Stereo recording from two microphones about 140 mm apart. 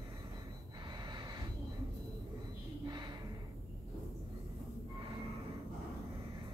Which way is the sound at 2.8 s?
30° right (ahead or behind).